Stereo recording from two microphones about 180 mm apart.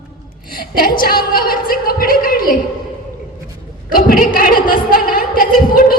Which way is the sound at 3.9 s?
50° left (ahead or behind).